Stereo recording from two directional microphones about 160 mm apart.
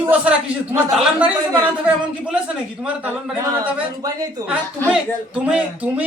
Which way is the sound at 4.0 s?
25° right (ahead or behind).